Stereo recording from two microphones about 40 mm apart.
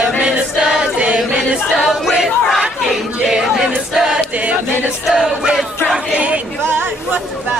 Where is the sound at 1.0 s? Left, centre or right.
Right.